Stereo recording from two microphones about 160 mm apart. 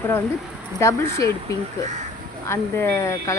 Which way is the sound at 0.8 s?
20° left (ahead or behind).